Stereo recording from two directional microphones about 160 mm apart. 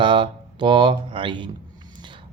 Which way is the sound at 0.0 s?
30° right (ahead or behind).